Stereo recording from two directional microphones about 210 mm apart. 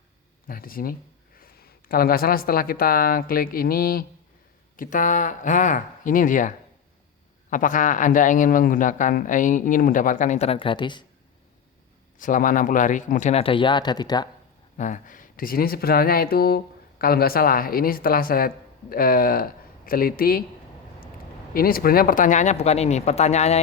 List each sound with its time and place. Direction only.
0.4 s speech: 45° left (ahead or behind)
7.5 s speech: 40° left (ahead or behind); by 11.0 s 20° left (ahead or behind)
12.2 s speech: 40° left (ahead or behind); by 14.3 s 20° left (ahead or behind)
14.8 s speech: 35° left (ahead or behind)
21.5 s speech: 45° left (ahead or behind)